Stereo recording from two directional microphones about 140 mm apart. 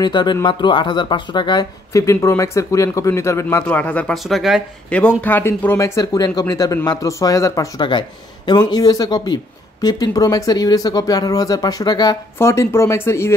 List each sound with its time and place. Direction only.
0.0 s speech: 30° left (ahead or behind); by 4.6 s centre (ahead or behind)
5.2 s speech: 15° left (ahead or behind)
5.9 s speech: 25° left (ahead or behind)